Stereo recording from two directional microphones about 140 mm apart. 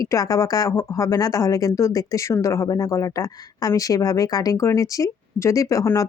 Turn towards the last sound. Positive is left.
turn(degrees=25)  # may be behind; listen again after turning